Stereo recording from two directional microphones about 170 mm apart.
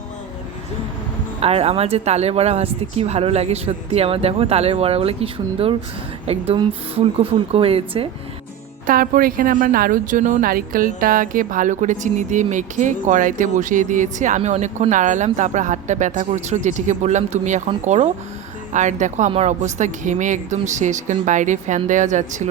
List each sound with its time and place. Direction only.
1.4 s speech: 35° right (ahead or behind)
8.9 s a woman's voice: 55° right (ahead or behind)